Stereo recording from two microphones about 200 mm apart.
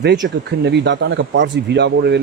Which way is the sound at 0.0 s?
55° right (ahead or behind).